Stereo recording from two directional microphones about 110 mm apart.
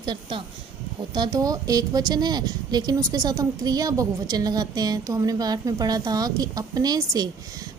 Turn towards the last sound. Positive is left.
turn(degrees=-35)  # may be behind; listen again after turning